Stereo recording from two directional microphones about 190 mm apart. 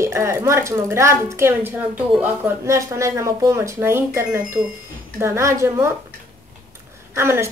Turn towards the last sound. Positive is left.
turn(degrees=-15)  # may be behind; listen again after turning